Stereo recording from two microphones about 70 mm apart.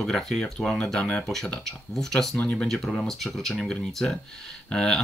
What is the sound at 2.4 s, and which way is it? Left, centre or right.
Speech, centre.